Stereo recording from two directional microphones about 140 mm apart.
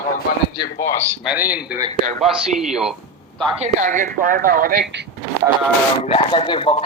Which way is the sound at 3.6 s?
60° right (ahead or behind).